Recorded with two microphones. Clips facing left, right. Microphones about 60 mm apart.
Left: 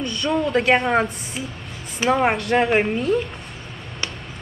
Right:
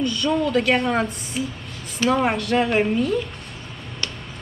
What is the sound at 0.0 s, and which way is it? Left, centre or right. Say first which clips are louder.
Speech: right 1 dB; centre.